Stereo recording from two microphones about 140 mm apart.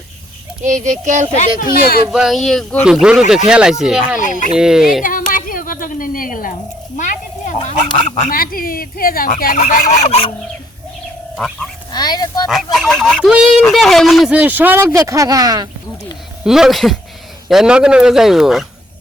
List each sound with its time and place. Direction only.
0.6 s a child's voice: 60° right (ahead or behind)
1.5 s speech: 90° left
2.0 s a man's voice: 5° right (ahead or behind)
4.2 s speech: 65° left (ahead or behind)
4.5 s a man's voice: 5° right (ahead or behind)
5.0 s a sound: 80° left; by 8.3 s 55° left (ahead or behind)
8.3 s speech: 90° left
9.6 s fowl: 65° left (ahead or behind); by 10.3 s 45° left (ahead or behind)
11.9 s speech: 30° left (ahead or behind)
12.5 s a man's voice: centre (ahead or behind)
14.3 s speech: 10° right (ahead or behind); by 15.7 s 30° right (ahead or behind)
16.4 s a man's voice: 5° right (ahead or behind)